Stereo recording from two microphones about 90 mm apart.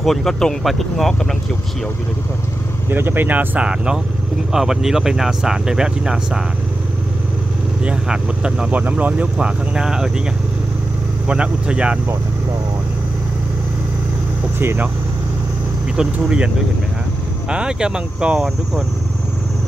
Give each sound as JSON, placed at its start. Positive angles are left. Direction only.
{"t": 0.0, "sound": "speech", "side_deg": 5}
{"t": 2.9, "sound": "speech", "side_deg": -25}
{"t": 7.8, "sound": "speech", "side_deg": -10}
{"t": 11.2, "sound": "speech", "side_deg": -10}
{"t": 14.6, "sound": "speech", "side_deg": -25}
{"t": 16.0, "sound": "speech", "side_deg": -10}
{"t": 17.5, "sound": "speech", "side_deg": -10}